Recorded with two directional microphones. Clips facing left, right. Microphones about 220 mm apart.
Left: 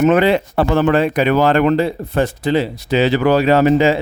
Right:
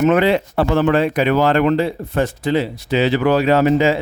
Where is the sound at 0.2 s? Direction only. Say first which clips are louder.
Left 1 dB; 50° left (ahead or behind).